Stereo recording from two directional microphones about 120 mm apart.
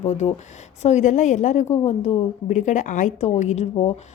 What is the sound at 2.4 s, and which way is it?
A woman's voice, 85° left.